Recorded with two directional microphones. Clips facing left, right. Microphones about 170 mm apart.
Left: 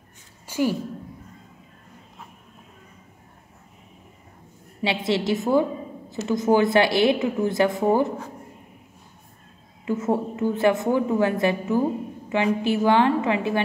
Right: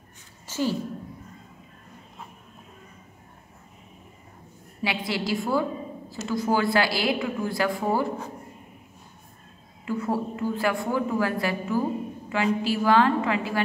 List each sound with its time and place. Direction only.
0.5 s a sound: 15° left (ahead or behind)
4.8 s a woman's voice: 25° left (ahead or behind)
9.8 s a woman's voice: 20° left (ahead or behind)